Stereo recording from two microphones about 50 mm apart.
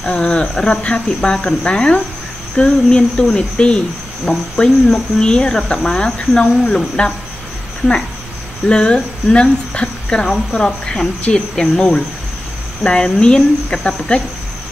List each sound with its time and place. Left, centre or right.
0.0 s speech: centre
8.6 s speech: centre